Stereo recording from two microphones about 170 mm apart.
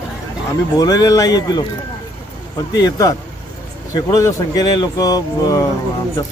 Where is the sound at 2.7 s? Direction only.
20° left (ahead or behind).